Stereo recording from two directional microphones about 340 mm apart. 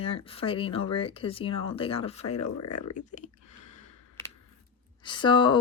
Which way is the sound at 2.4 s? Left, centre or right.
Left.